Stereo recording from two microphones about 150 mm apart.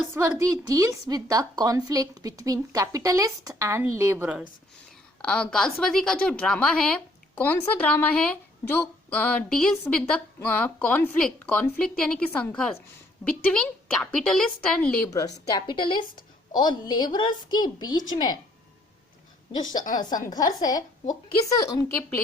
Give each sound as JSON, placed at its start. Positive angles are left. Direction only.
{"t": 0.1, "sound": "a woman's voice", "side_deg": -15}
{"t": 5.2, "sound": "a woman's voice", "side_deg": 5}
{"t": 15.1, "sound": "a woman's voice", "side_deg": 25}
{"t": 20.3, "sound": "a woman's voice", "side_deg": 25}